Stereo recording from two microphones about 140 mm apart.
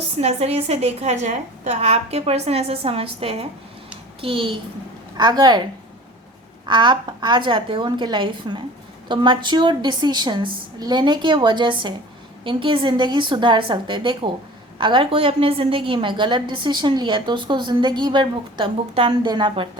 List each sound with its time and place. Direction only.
0.2 s a woman's voice: 50° right (ahead or behind); by 5.6 s 30° right (ahead or behind)
6.7 s a woman's voice: 35° right (ahead or behind)